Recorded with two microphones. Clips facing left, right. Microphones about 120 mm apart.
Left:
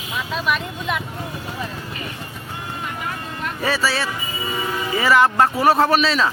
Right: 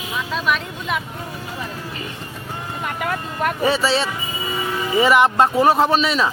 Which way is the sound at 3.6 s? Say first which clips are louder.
Right 2 dB; 25° right (ahead or behind).